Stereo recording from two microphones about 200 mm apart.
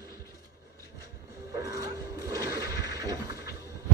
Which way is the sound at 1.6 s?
15° right (ahead or behind).